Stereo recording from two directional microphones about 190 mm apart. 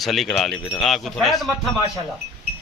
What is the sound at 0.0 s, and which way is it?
A man's voice, centre (ahead or behind).